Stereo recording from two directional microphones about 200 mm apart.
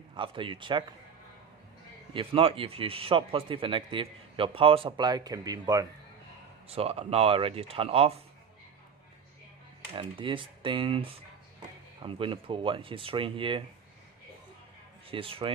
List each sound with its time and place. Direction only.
0.1 s speech: 25° right (ahead or behind)
2.1 s speech: 25° right (ahead or behind)
6.7 s speech: 30° right (ahead or behind)
9.9 s speech: 25° right (ahead or behind)
15.0 s speech: 25° right (ahead or behind)